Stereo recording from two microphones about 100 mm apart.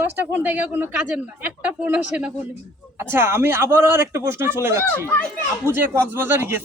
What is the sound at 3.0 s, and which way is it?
Speech, 25° right (ahead or behind).